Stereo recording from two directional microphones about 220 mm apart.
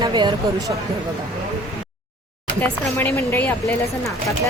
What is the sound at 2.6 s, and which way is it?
Speech, 10° left (ahead or behind).